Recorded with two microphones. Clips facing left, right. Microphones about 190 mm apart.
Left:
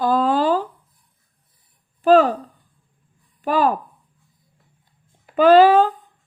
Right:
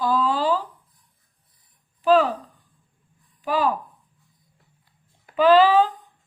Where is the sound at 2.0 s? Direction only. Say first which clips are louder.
Left 4 dB; 45° left (ahead or behind).